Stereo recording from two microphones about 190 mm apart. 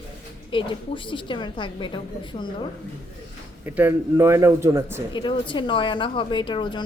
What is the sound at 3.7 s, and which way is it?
Speech, 10° right (ahead or behind).